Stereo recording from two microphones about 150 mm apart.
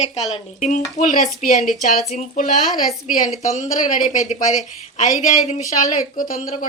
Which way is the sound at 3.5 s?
55° left (ahead or behind).